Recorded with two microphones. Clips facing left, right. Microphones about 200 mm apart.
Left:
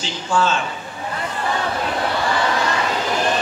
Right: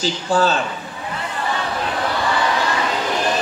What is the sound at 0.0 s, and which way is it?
Speech, 35° right (ahead or behind).